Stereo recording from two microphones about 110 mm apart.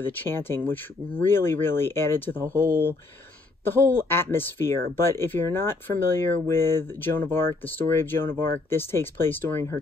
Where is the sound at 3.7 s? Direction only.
20° left (ahead or behind).